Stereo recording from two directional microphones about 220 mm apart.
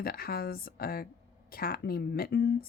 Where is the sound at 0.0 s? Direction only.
45° left (ahead or behind).